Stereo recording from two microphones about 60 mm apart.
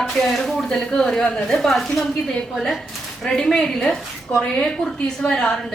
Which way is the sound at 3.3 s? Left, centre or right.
Centre.